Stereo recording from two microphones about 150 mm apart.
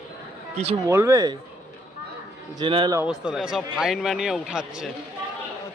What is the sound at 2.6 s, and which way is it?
Speech, 30° right (ahead or behind).